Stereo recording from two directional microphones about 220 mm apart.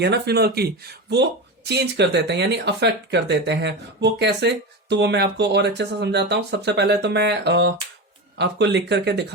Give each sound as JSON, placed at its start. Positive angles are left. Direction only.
{"t": 0.0, "sound": "speech", "side_deg": -50}